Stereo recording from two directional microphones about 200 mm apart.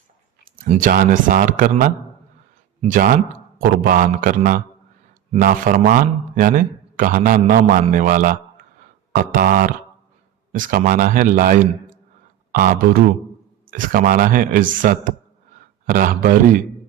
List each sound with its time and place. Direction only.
0.5 s a man's voice: 45° right (ahead or behind)